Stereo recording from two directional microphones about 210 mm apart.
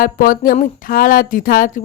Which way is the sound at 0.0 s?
40° left (ahead or behind).